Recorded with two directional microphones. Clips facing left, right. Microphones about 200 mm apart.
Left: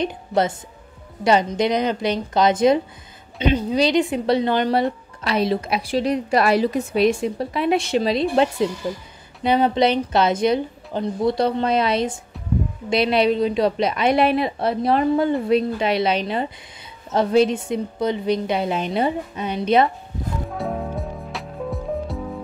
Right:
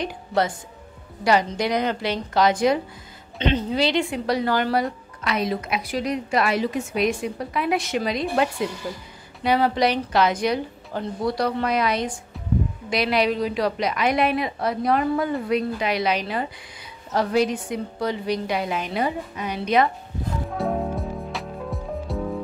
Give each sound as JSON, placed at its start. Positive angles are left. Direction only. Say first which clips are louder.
{"t": 0.0, "sound": "a woman's voice", "louder": "left 3 dB", "side_deg": 20}
{"t": 3.3, "sound": "a woman's voice", "louder": "left 3 dB", "side_deg": 10}
{"t": 20.5, "sound": "music", "louder": "right 3 dB", "side_deg": 0}